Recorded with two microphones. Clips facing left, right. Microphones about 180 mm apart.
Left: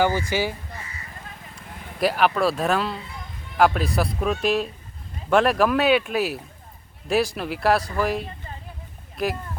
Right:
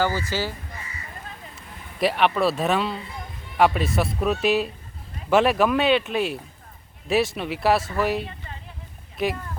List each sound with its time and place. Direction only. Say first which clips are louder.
0.0 s speech: left 3 dB; 15° left (ahead or behind)
1.5 s speech: left 1 dB; centre (ahead or behind)